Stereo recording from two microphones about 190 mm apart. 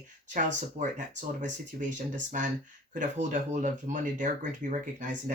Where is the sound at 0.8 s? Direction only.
40° right (ahead or behind).